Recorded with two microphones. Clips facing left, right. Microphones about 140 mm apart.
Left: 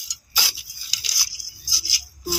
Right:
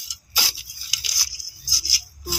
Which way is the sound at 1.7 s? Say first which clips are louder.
Even; 40° right (ahead or behind).